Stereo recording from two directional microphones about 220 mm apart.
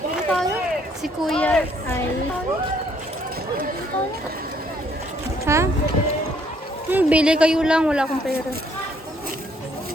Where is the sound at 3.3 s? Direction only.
40° right (ahead or behind).